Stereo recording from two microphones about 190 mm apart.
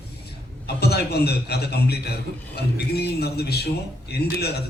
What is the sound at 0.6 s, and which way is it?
A man's voice, 60° left (ahead or behind).